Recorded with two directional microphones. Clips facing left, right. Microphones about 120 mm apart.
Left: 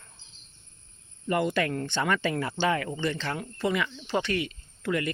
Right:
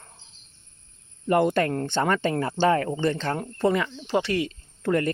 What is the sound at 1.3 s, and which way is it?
Speech, 50° right (ahead or behind).